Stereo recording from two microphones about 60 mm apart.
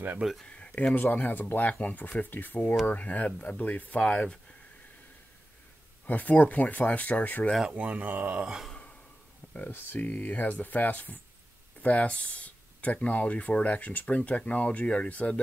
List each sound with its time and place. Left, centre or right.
0.5 s speech: centre
6.0 s speech: left
7.7 s speech: right
9.7 s speech: left